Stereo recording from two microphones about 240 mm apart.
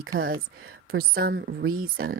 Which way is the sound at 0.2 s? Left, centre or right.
Right.